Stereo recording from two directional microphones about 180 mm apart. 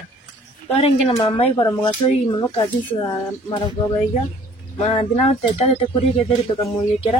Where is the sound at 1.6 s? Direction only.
15° left (ahead or behind).